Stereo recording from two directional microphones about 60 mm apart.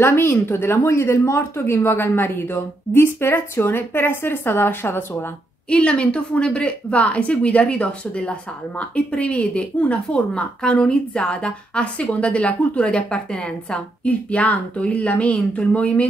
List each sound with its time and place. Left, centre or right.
0.0 s a woman's voice: left
5.7 s a woman's voice: centre